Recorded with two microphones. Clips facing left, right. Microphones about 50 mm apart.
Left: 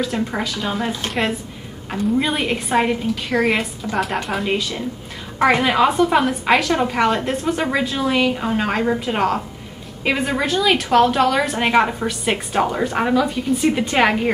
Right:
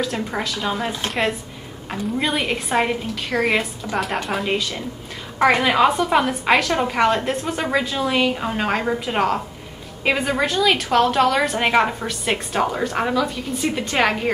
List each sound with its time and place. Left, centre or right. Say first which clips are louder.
0.0 s a woman's voice: left 2 dB; centre